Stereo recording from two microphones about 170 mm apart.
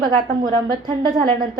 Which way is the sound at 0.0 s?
25° right (ahead or behind).